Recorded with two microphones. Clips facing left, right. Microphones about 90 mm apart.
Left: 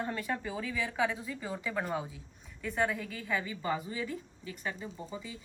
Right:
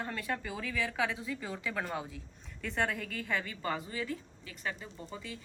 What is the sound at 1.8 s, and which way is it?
A woman's voice, 5° left (ahead or behind).